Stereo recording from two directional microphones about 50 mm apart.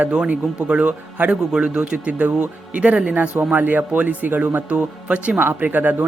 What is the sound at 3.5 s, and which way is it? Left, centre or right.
A woman's voice, right.